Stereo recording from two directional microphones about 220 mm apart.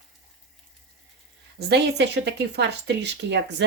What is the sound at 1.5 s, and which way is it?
Speech, 50° right (ahead or behind).